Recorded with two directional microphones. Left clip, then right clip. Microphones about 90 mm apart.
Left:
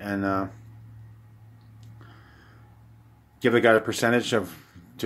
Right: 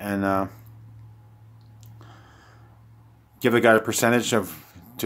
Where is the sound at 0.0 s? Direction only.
45° right (ahead or behind).